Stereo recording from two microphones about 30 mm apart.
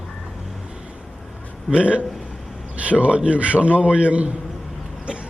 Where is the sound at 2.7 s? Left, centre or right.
Right.